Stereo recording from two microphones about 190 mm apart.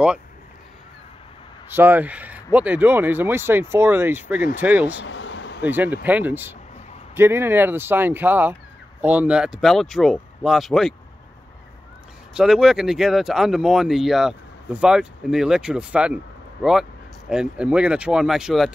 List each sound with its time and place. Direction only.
1.7 s speech: 10° right (ahead or behind)
4.9 s a sound: 80° left
5.6 s speech: 10° right (ahead or behind)
12.4 s speech: 5° right (ahead or behind)
17.3 s speech: 5° right (ahead or behind)